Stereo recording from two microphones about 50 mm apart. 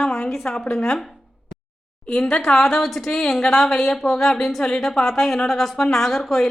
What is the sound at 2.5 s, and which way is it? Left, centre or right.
A woman's voice, centre.